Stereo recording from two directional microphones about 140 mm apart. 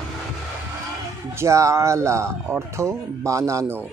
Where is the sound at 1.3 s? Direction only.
20° right (ahead or behind).